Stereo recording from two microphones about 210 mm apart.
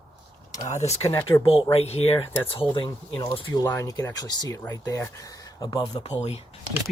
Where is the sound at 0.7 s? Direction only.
30° left (ahead or behind).